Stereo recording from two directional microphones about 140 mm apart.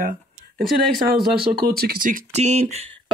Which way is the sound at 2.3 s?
55° right (ahead or behind).